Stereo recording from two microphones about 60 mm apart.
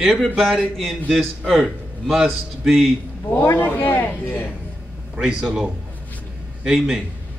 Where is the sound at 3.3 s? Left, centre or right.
Left.